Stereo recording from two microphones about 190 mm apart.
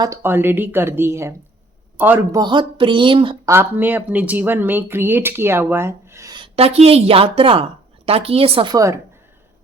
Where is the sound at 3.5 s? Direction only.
10° right (ahead or behind).